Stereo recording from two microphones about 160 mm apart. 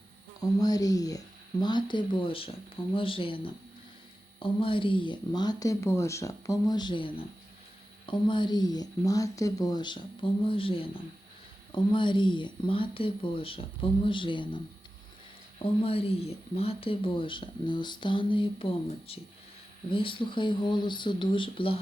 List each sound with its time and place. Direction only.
0.4 s speech: 25° left (ahead or behind)